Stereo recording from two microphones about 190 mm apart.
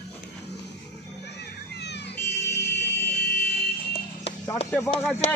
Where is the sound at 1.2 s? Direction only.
60° left (ahead or behind).